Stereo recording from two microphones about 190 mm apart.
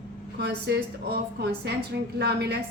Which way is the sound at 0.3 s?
60° right (ahead or behind).